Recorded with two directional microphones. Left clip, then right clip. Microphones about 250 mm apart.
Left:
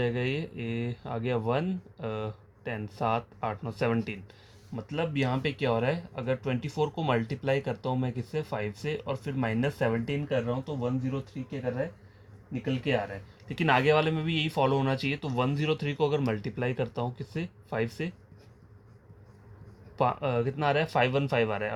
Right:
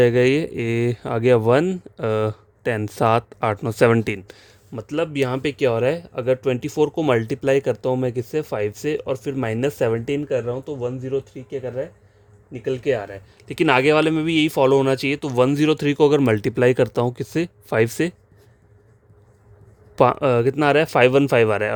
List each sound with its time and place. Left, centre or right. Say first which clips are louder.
0.0 s speech: right 15 dB; right
12.8 s speech: right 5 dB; right
20.0 s speech: right 11 dB; right